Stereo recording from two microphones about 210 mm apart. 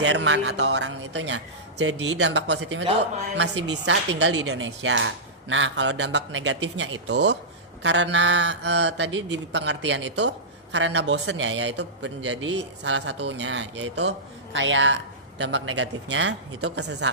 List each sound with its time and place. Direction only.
0.0 s speech: 60° right (ahead or behind)